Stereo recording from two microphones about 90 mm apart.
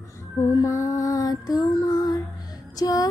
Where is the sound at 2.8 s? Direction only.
45° left (ahead or behind).